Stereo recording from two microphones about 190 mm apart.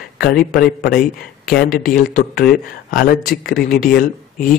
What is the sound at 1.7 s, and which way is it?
Speech, 50° left (ahead or behind).